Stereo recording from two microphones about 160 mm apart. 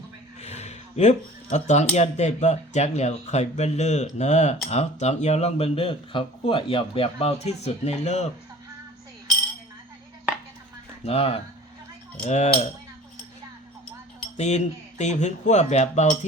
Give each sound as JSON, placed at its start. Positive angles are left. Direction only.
{"t": 0.4, "sound": "speech", "side_deg": 40}
{"t": 11.0, "sound": "speech", "side_deg": 40}
{"t": 14.3, "sound": "speech", "side_deg": 45}